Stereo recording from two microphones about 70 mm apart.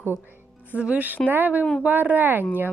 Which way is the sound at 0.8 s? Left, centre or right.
Centre.